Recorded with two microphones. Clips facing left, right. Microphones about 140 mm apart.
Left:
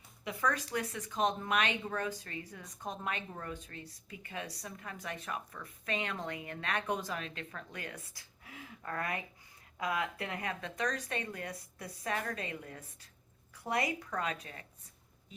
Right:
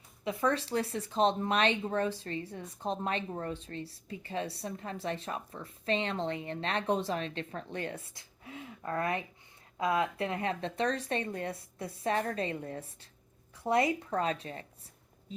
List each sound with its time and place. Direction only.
0.3 s speech: 25° right (ahead or behind)